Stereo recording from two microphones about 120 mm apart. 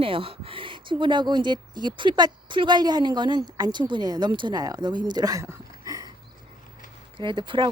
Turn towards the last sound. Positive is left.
turn(degrees=-40)  # may be behind; listen again after turning